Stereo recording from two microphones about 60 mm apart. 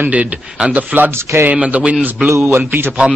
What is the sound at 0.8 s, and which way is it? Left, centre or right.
Speech, right.